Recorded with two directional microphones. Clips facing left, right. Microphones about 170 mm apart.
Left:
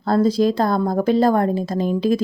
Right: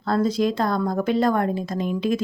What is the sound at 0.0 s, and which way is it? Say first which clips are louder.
Speech: left 4 dB; 30° left (ahead or behind).